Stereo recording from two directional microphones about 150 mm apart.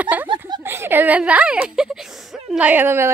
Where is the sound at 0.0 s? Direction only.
10° right (ahead or behind).